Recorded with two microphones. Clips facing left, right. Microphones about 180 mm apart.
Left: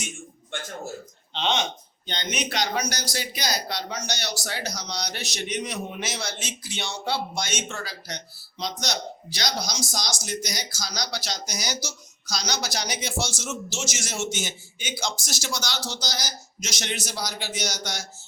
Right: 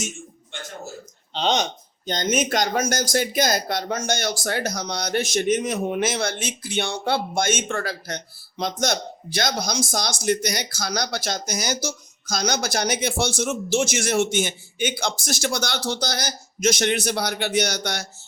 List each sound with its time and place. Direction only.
1.3 s speech: 40° right (ahead or behind); by 18.0 s 60° right (ahead or behind)